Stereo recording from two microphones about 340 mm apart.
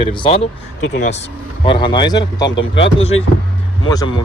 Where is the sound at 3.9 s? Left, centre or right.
Centre.